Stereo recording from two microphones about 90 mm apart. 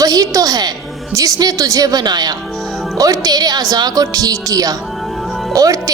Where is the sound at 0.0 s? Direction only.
40° right (ahead or behind).